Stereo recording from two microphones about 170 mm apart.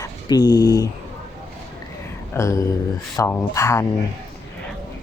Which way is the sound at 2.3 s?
15° left (ahead or behind).